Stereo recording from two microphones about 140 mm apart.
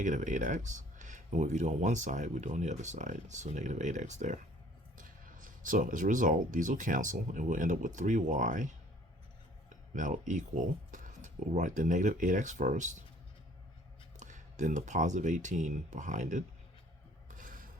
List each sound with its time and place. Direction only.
0.0 s speech: 65° right (ahead or behind)
4.9 s speech: 75° right (ahead or behind)
14.2 s speech: 60° right (ahead or behind)
17.2 s a sound: 70° right (ahead or behind)